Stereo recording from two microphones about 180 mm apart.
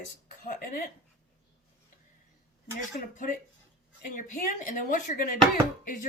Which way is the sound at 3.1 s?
50° left (ahead or behind).